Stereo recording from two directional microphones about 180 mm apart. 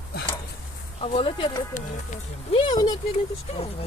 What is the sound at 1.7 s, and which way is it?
Speech, 45° left (ahead or behind).